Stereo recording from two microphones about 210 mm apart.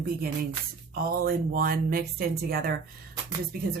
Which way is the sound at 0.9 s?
45° right (ahead or behind).